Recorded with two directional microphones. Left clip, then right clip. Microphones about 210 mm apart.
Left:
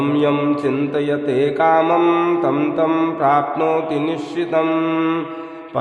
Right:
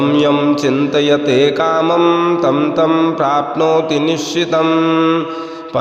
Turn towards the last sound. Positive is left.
turn(degrees=-15)  # may be behind; listen again after turning